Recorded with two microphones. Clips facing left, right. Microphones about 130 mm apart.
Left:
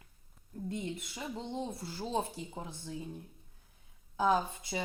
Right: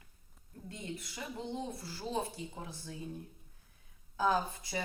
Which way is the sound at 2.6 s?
25° left (ahead or behind).